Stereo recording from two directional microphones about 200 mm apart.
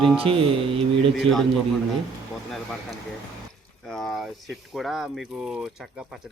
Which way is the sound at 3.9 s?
Centre (ahead or behind).